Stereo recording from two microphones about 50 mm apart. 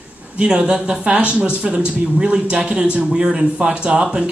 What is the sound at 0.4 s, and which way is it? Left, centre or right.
A man's voice, centre.